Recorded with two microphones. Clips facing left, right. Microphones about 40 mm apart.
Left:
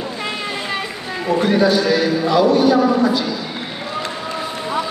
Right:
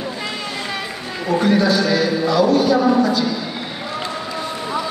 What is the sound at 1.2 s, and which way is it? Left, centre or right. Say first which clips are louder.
A man's voice: left 1 dB; centre.